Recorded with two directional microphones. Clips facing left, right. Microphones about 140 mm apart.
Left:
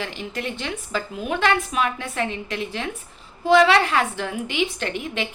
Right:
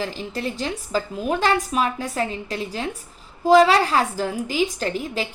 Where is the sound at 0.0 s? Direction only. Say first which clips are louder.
Right 2 dB; 35° right (ahead or behind).